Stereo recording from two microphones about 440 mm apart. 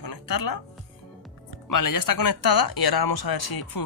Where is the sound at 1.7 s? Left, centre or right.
Left.